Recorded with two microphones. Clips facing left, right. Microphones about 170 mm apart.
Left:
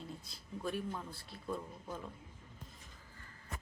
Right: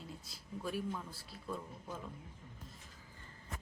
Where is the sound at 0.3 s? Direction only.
5° right (ahead or behind).